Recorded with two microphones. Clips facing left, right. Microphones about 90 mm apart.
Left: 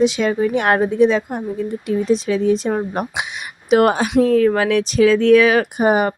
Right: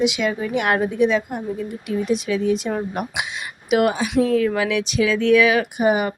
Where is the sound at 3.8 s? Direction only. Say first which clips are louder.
Left 4 dB; 50° left (ahead or behind).